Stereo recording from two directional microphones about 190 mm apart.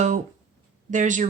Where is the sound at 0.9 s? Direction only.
40° right (ahead or behind).